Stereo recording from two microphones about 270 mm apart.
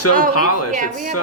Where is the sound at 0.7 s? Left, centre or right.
Right.